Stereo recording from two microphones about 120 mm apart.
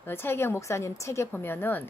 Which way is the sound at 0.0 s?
20° left (ahead or behind).